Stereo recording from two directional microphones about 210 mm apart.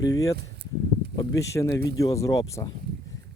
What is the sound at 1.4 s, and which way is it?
Speech, 15° left (ahead or behind).